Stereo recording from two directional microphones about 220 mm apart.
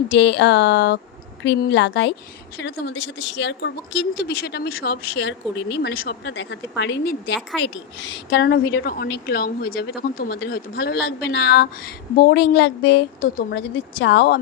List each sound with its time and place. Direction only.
0.1 s speech: 55° left (ahead or behind)
13.7 s speech: 55° left (ahead or behind)